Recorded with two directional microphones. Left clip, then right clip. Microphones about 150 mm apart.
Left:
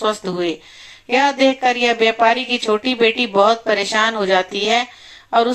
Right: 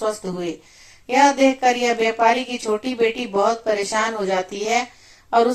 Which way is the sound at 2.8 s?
50° left (ahead or behind).